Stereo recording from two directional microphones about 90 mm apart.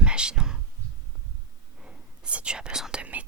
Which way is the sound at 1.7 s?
10° right (ahead or behind).